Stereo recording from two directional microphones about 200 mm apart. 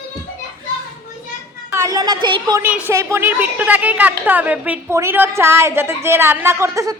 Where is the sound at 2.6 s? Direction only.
10° right (ahead or behind).